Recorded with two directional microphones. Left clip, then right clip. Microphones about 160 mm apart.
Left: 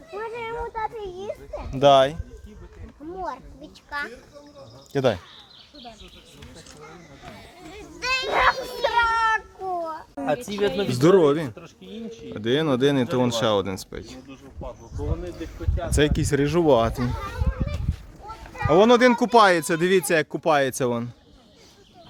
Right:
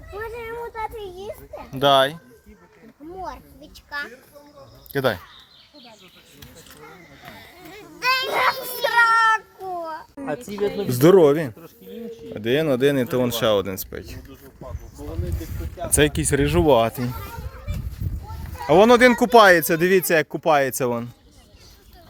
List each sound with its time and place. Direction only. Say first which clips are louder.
0.2 s children playing: even; 90° right
1.7 s speech: left 1 dB; centre (ahead or behind)
3.2 s a sound: left 1 dB; 70° right (ahead or behind)
4.9 s speech: even; centre (ahead or behind)
7.3 s a sound: right 1 dB; 40° right (ahead or behind); by 9.4 s 85° right
10.2 s speech: left 2 dB; 25° left (ahead or behind)
10.9 s speech: right 4 dB; 30° right (ahead or behind)
11.9 s speech: right 3 dB; centre (ahead or behind)
16.0 s speech: right 2 dB; 35° right (ahead or behind)
16.7 s speech: right 2 dB; 10° right (ahead or behind)
18.7 s speech: right 3 dB; 40° right (ahead or behind); by 21.0 s 10° right (ahead or behind)